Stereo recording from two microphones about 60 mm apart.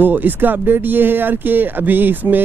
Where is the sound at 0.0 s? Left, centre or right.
Right.